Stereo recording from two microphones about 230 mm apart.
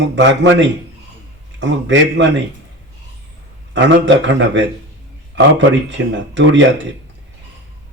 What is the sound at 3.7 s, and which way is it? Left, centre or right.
Speech, right.